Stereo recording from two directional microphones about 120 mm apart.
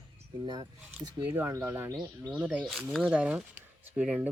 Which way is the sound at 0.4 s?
40° right (ahead or behind).